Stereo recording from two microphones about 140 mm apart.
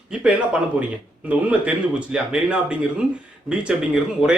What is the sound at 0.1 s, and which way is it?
Speech, 10° right (ahead or behind).